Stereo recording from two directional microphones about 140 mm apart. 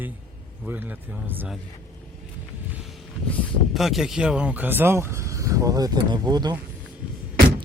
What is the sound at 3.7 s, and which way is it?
Speech, centre (ahead or behind).